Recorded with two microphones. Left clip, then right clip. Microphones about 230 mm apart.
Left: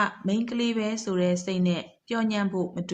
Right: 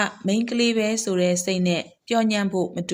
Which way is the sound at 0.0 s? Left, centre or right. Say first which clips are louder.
Right 3 dB; right.